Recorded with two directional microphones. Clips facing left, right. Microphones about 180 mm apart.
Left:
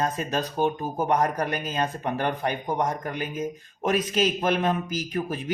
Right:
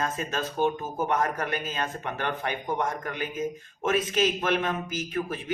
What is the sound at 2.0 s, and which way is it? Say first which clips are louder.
Speech: left 4 dB; 35° left (ahead or behind).